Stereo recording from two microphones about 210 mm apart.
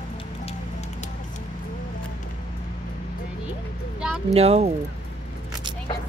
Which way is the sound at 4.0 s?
5° right (ahead or behind).